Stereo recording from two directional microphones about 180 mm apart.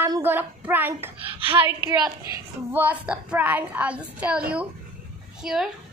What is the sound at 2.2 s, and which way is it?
A woman's voice, 10° right (ahead or behind).